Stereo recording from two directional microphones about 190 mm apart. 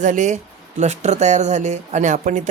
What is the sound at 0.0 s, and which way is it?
Speech, 40° right (ahead or behind).